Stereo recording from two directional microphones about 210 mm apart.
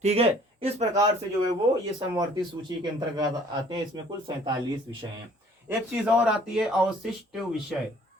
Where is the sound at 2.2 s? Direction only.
20° right (ahead or behind).